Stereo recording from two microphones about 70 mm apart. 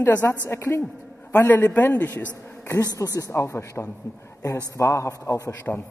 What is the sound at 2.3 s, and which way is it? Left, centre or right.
Speech, left.